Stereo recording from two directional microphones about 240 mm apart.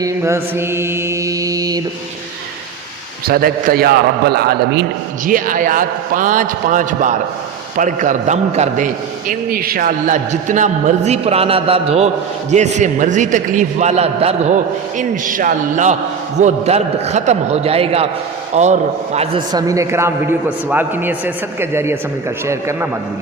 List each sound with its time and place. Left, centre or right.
0.0 s mantra: centre
3.2 s a man's voice: right; by 22.9 s centre